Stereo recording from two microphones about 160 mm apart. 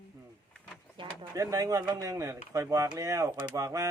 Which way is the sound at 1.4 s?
20° right (ahead or behind).